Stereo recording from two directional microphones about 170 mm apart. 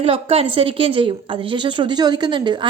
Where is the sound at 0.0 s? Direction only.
35° right (ahead or behind).